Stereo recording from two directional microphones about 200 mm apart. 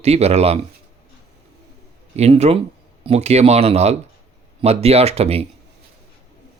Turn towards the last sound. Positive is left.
turn(degrees=-30)  # may be behind; listen again after turning